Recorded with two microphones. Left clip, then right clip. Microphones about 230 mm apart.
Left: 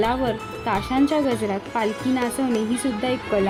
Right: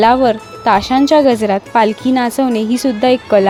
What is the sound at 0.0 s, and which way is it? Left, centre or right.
Speech, right.